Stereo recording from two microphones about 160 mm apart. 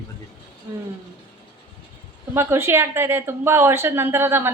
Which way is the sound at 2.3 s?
15° right (ahead or behind).